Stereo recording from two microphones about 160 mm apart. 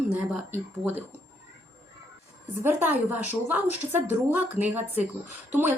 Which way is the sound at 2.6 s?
10° right (ahead or behind).